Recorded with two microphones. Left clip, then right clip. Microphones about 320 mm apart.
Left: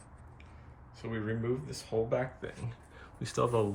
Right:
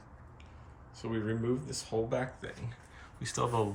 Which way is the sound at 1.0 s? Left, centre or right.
Centre.